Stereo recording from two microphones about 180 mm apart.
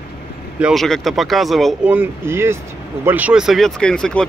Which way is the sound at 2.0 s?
15° right (ahead or behind).